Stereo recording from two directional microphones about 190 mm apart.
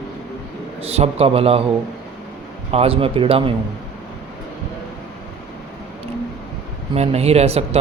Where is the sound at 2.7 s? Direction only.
30° right (ahead or behind).